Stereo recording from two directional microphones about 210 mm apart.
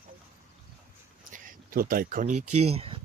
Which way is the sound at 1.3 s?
40° right (ahead or behind).